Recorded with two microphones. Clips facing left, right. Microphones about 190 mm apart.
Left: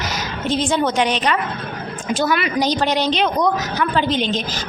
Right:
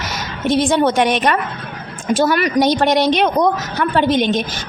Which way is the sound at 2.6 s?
55° right (ahead or behind).